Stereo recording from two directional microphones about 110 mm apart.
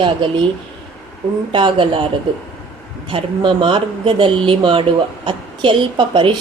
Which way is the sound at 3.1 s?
50° right (ahead or behind).